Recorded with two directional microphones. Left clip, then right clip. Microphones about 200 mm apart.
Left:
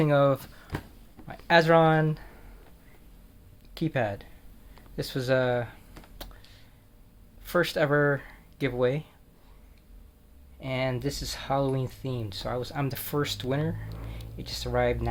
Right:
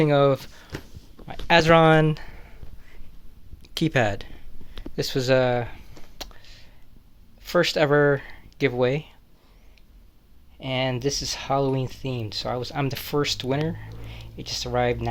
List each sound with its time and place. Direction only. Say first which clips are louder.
0.0 s speech: right 4 dB; 35° right (ahead or behind); by 2.3 s 55° right (ahead or behind)
3.8 s speech: right 6 dB; 55° right (ahead or behind)
4.9 s a sound: right 5 dB; 45° right (ahead or behind)
7.4 s speech: right 5 dB; 40° right (ahead or behind)
10.6 s speech: right 4 dB; 40° right (ahead or behind)